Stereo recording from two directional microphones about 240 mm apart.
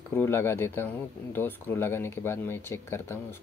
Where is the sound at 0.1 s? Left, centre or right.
Centre.